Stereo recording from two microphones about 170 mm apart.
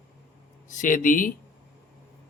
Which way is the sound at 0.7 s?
50° left (ahead or behind).